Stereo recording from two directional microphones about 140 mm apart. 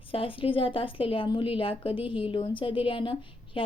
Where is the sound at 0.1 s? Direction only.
40° left (ahead or behind).